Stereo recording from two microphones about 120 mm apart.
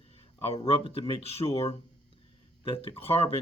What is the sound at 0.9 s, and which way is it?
Speech, 55° left (ahead or behind).